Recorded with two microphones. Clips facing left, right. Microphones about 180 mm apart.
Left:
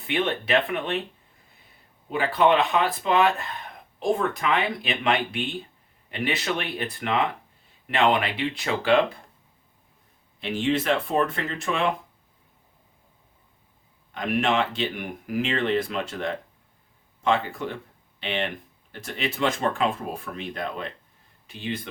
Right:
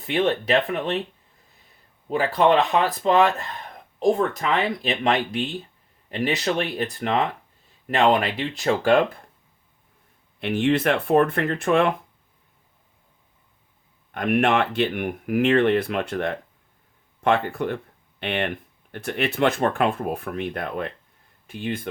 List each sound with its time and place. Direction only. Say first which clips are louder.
0.1 s speech: right 3 dB; 40° right (ahead or behind)
2.0 s speech: right 2 dB; 40° right (ahead or behind)
10.4 s speech: right 4 dB; 60° right (ahead or behind)
14.1 s speech: right 4 dB; 55° right (ahead or behind)